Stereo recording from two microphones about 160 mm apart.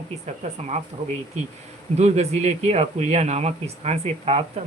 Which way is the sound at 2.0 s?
45° right (ahead or behind).